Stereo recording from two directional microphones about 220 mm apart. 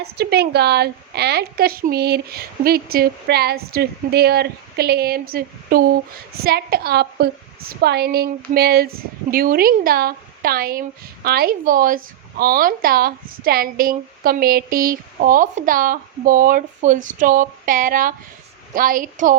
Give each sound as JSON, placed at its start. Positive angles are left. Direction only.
{"t": 0.0, "sound": "a woman's voice", "side_deg": -45}